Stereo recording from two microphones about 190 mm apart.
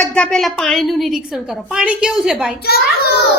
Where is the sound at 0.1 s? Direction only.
5° left (ahead or behind).